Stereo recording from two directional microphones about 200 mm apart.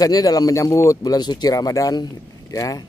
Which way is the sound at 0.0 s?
20° left (ahead or behind).